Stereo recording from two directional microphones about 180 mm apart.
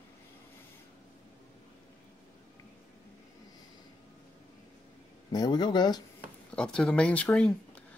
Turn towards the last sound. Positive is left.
turn(degrees=5)  # may be behind; listen again after turning